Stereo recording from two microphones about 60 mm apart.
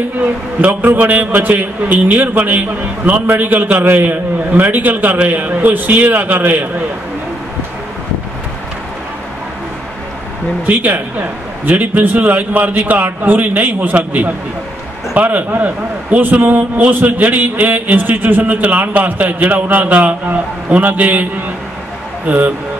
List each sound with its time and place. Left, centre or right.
0.6 s a man's voice: right
10.6 s a man's voice: right